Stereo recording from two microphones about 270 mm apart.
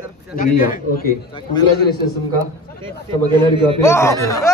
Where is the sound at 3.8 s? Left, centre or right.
Centre.